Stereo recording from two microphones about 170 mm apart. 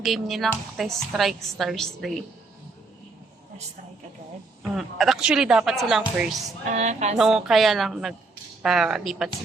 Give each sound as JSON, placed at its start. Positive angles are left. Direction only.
{"t": 0.0, "sound": "speech", "side_deg": 0}
{"t": 4.7, "sound": "speech", "side_deg": 0}
{"t": 6.7, "sound": "a sound", "side_deg": -40}
{"t": 7.2, "sound": "speech", "side_deg": -5}